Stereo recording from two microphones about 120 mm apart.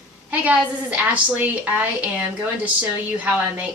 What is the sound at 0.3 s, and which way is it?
Speech, 10° right (ahead or behind).